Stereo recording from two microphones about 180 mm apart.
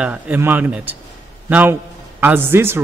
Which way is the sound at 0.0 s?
10° right (ahead or behind).